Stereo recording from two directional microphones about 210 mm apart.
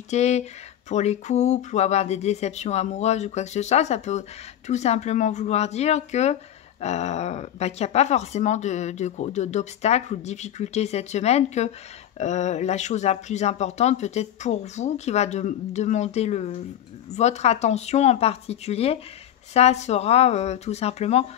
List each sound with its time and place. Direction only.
0.1 s speech: 30° left (ahead or behind)